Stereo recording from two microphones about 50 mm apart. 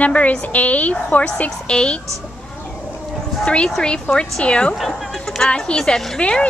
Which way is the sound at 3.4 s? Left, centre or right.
Centre.